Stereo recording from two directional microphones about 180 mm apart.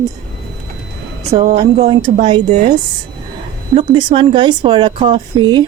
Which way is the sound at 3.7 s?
25° right (ahead or behind).